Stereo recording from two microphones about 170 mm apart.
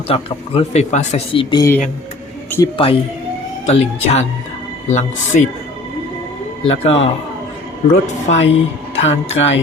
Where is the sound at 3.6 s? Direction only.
40° left (ahead or behind).